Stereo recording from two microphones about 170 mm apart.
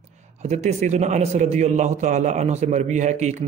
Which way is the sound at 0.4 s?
40° right (ahead or behind).